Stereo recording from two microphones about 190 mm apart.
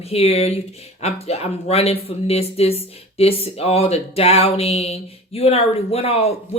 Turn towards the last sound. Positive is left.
turn(degrees=30)  # may be behind; listen again after turning